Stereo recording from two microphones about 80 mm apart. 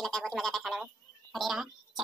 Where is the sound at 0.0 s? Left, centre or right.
Centre.